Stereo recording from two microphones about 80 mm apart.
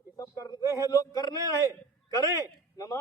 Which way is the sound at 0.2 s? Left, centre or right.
Left.